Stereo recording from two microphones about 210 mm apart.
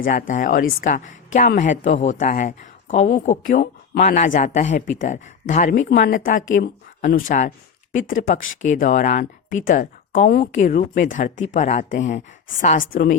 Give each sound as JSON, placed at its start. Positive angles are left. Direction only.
{"t": 0.0, "sound": "speech", "side_deg": 40}